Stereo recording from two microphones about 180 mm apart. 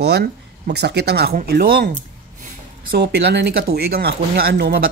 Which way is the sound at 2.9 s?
65° right (ahead or behind).